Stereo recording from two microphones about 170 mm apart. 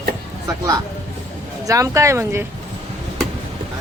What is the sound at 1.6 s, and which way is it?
Speech, 20° right (ahead or behind).